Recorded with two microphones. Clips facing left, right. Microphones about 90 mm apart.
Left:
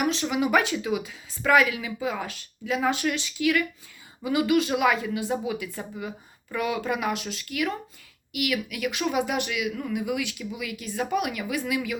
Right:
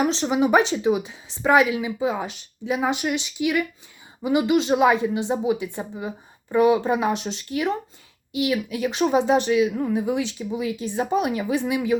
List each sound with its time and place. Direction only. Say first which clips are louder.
0.0 s a woman's voice: right 4 dB; 30° right (ahead or behind)